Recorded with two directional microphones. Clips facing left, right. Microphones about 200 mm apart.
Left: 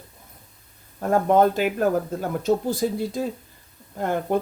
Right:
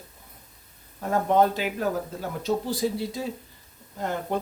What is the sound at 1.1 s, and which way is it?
Speech, 50° left (ahead or behind).